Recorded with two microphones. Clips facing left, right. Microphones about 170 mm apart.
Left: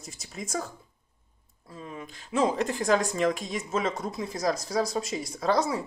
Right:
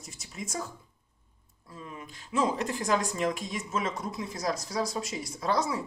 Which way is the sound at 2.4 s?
30° left (ahead or behind).